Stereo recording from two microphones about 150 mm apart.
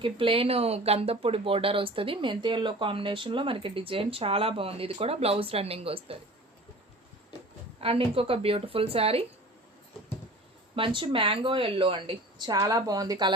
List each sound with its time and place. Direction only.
0.0 s speech: 35° right (ahead or behind)
7.8 s speech: 40° right (ahead or behind)
10.8 s speech: 35° right (ahead or behind)